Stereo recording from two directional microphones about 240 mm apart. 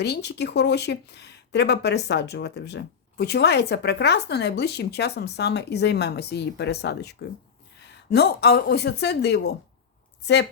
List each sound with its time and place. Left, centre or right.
0.0 s speech: left